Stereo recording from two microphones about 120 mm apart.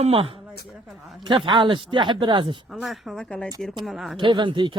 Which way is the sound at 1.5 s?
40° right (ahead or behind).